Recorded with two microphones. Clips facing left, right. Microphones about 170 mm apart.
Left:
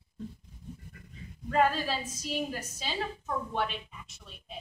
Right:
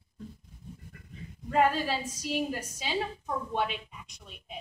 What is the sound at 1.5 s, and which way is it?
A woman's voice, 10° right (ahead or behind).